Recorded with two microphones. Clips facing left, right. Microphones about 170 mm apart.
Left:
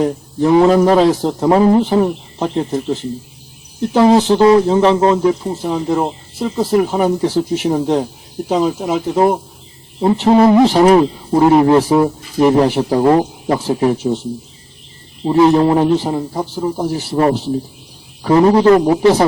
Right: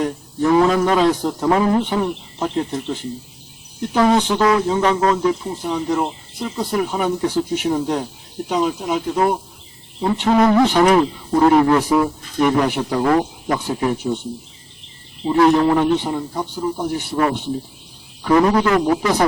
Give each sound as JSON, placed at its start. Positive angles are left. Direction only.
{"t": 0.0, "sound": "a man's voice", "side_deg": 30}
{"t": 3.9, "sound": "a man's voice", "side_deg": 30}
{"t": 15.5, "sound": "a man's voice", "side_deg": 30}